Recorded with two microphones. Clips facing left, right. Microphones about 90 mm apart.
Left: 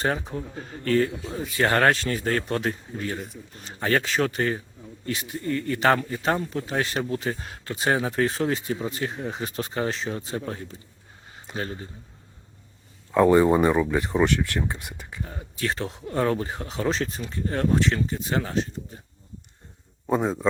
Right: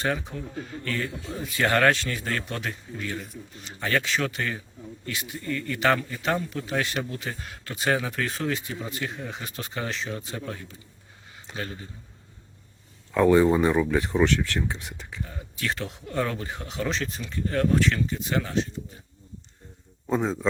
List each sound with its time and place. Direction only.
0.0 s speech: 35° left (ahead or behind)
13.1 s speech: 15° left (ahead or behind)
15.2 s speech: 35° left (ahead or behind)
20.1 s speech: 10° left (ahead or behind)